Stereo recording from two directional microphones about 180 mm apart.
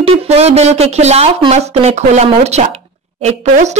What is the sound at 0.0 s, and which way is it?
Speech, 35° right (ahead or behind).